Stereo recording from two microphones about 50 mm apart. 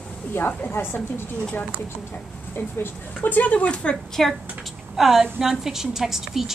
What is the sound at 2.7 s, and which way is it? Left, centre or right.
Speech, left.